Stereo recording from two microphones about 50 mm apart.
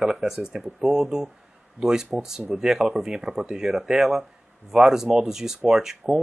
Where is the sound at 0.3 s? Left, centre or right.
Centre.